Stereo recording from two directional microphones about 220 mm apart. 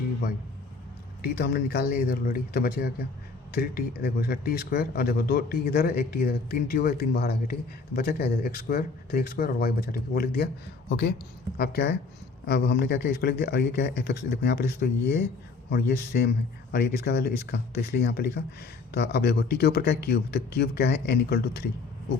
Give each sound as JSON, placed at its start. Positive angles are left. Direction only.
{"t": 1.2, "sound": "speech", "side_deg": 45}
{"t": 16.1, "sound": "speech", "side_deg": 45}